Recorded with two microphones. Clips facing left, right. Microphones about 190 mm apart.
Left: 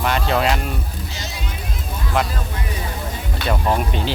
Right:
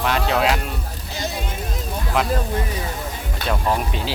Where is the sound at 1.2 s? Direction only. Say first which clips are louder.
Right 10 dB; 55° right (ahead or behind).